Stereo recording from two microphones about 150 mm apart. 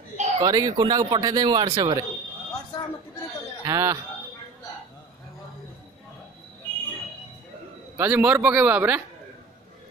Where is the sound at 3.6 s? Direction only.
20° right (ahead or behind).